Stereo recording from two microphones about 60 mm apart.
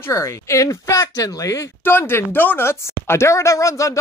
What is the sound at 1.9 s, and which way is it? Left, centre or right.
Speech, left.